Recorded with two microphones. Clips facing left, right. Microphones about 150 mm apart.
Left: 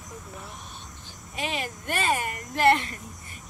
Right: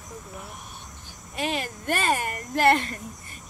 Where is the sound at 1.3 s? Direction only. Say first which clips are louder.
Right 3 dB; 40° right (ahead or behind).